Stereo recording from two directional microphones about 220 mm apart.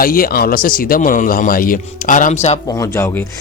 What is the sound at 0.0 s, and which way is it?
A man's voice, 40° left (ahead or behind).